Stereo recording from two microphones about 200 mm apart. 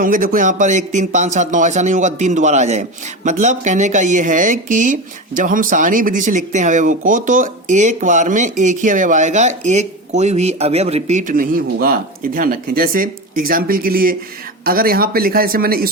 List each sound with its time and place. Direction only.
0.0 s speech: 45° right (ahead or behind)